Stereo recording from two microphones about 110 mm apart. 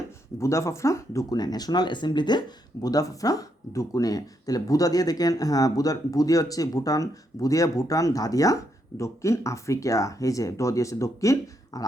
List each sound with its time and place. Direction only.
0.3 s speech: 25° left (ahead or behind)